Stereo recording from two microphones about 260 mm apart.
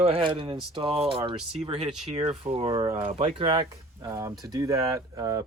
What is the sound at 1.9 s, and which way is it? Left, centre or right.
Speech, centre.